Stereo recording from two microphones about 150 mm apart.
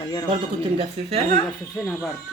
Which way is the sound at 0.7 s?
40° right (ahead or behind).